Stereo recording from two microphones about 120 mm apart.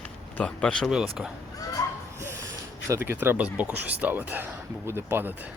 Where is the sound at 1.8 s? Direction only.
30° left (ahead or behind).